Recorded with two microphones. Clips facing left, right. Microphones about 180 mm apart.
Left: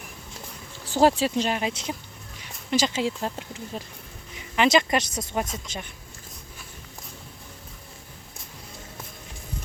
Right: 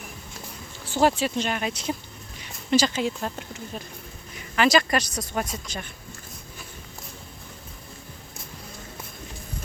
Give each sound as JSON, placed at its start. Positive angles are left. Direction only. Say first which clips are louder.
{"t": 0.9, "sound": "speech", "louder": "left 2 dB", "side_deg": 35}